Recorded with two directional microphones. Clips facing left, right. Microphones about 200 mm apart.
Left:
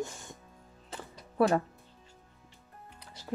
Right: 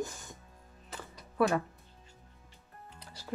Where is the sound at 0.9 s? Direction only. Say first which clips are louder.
Left 2 dB; 30° left (ahead or behind).